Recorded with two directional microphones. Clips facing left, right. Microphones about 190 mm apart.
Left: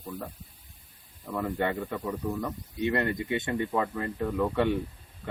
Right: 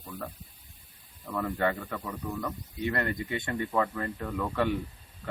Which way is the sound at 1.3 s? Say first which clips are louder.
Even; 20° left (ahead or behind).